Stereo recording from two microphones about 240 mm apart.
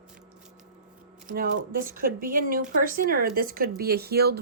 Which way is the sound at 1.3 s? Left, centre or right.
Right.